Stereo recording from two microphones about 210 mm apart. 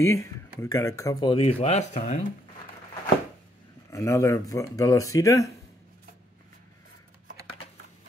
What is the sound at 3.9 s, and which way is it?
Speech, 15° left (ahead or behind).